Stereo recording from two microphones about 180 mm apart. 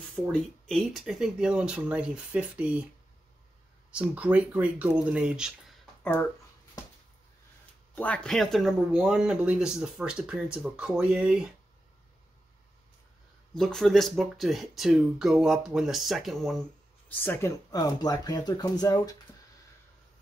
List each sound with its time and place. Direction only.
0.1 s speech: 5° left (ahead or behind)
3.9 s speech: 5° right (ahead or behind)
7.9 s speech: 10° left (ahead or behind)
13.6 s speech: centre (ahead or behind)
17.1 s speech: 10° left (ahead or behind)